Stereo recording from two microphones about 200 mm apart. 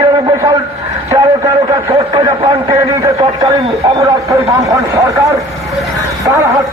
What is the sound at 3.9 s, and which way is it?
Speech, 15° right (ahead or behind).